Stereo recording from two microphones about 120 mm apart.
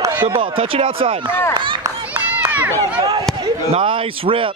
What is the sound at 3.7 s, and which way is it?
Speech, 50° right (ahead or behind).